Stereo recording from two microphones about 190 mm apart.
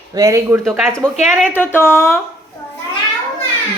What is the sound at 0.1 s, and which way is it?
Speech, 20° right (ahead or behind).